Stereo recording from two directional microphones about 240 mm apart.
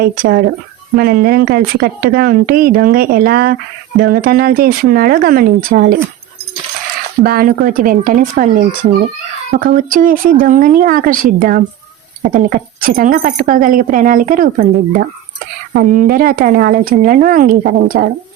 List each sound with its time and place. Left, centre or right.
0.0 s speech: right
7.2 s speech: right
15.7 s speech: right